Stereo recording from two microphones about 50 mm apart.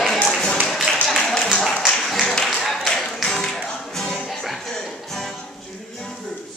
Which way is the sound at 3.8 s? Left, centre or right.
Centre.